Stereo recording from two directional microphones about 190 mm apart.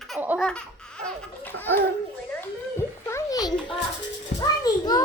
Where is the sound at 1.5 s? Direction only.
10° left (ahead or behind).